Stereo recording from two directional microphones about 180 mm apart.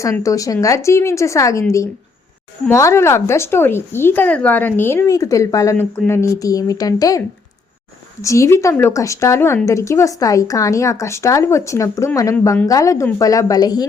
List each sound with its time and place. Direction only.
0.0 s speech: 15° left (ahead or behind)
2.6 s speech: 15° left (ahead or behind)
8.2 s speech: 15° left (ahead or behind)